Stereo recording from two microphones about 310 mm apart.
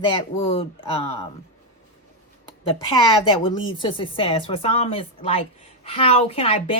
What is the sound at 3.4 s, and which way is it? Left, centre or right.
Speech, centre.